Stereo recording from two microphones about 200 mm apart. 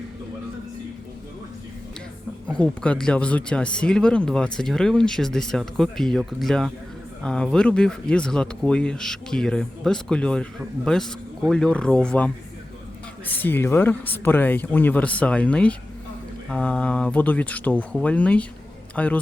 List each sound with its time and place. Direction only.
2.5 s speech: 5° left (ahead or behind)